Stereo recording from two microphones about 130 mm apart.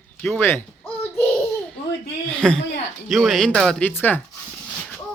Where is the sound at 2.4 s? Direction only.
5° left (ahead or behind).